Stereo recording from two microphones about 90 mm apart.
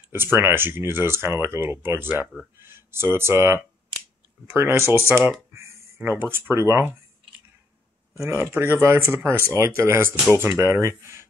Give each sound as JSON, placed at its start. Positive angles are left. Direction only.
{"t": 0.1, "sound": "speech", "side_deg": -25}
{"t": 5.5, "sound": "a sound", "side_deg": -30}
{"t": 6.5, "sound": "speech", "side_deg": -30}
{"t": 8.1, "sound": "speech", "side_deg": -30}